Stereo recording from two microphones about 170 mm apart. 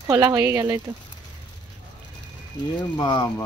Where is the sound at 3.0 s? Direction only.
25° left (ahead or behind).